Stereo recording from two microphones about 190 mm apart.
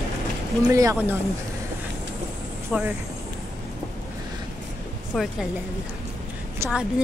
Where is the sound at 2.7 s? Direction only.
5° right (ahead or behind).